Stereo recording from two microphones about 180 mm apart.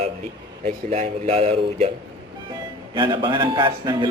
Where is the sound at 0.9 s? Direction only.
35° right (ahead or behind).